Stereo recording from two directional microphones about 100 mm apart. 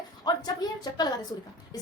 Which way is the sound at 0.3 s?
45° left (ahead or behind).